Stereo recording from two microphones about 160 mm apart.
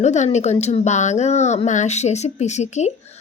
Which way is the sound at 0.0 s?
45° left (ahead or behind).